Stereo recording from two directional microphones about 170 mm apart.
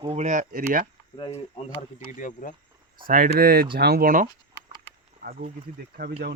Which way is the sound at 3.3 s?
60° right (ahead or behind).